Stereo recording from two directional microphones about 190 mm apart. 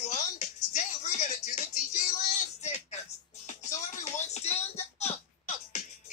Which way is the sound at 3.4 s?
40° left (ahead or behind).